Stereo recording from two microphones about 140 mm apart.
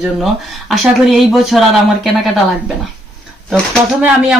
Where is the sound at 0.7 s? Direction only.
Centre (ahead or behind).